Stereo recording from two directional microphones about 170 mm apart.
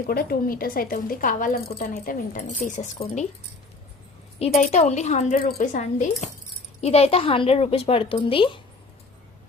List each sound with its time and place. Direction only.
0.1 s a woman's voice: 60° left (ahead or behind)
4.4 s a woman's voice: 40° left (ahead or behind)